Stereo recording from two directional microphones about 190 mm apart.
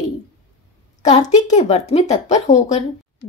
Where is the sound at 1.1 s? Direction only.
35° left (ahead or behind).